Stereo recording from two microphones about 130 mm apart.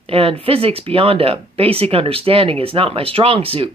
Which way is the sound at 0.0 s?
45° right (ahead or behind).